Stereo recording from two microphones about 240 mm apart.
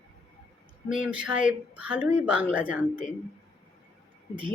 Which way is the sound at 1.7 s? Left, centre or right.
Centre.